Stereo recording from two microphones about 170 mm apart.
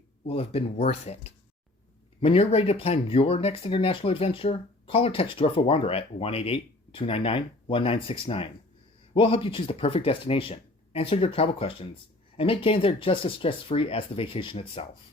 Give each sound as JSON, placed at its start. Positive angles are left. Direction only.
{"t": 0.3, "sound": "speech", "side_deg": 35}